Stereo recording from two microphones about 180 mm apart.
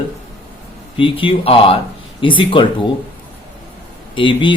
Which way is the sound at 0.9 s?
30° left (ahead or behind).